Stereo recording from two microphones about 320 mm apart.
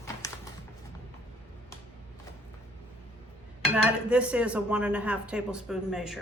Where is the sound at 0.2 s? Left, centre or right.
Centre.